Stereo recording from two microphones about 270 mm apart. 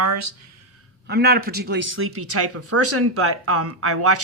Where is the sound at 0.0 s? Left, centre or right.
Right.